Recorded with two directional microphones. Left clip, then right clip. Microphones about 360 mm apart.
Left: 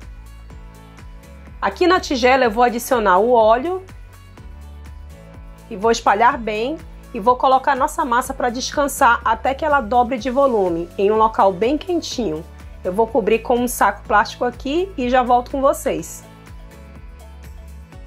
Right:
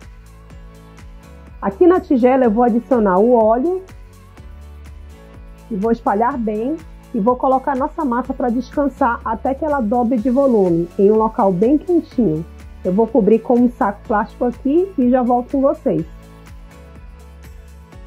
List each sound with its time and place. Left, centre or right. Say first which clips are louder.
1.6 s a woman's voice: right 2 dB; centre
5.8 s a woman's voice: left 2 dB; centre
7.2 s a woman's voice: left 1 dB; centre
12.8 s a woman's voice: right 2 dB; centre